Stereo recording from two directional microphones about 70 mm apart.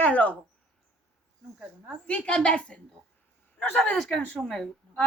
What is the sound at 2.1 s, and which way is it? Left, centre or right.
Speech, centre.